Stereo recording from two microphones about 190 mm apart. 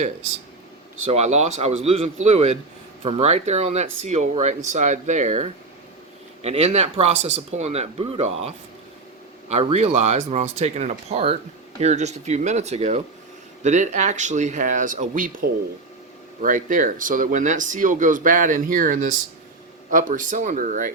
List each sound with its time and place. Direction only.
1.0 s speech: 35° right (ahead or behind)